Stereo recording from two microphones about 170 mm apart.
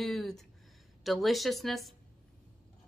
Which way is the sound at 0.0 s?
5° left (ahead or behind).